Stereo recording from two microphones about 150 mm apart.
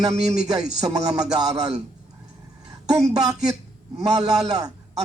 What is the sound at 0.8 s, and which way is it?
Speech, 25° right (ahead or behind).